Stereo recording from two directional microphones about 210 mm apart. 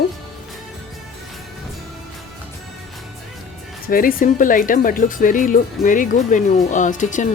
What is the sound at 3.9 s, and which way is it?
Speech, 40° left (ahead or behind).